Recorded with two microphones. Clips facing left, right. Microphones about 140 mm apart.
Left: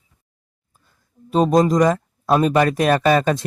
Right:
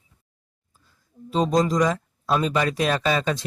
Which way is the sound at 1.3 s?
55° left (ahead or behind).